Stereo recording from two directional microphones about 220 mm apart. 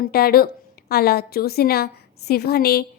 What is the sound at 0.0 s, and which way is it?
A woman's voice, 45° left (ahead or behind).